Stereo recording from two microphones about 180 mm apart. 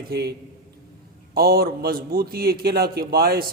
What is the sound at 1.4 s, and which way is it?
A man's voice, 55° right (ahead or behind).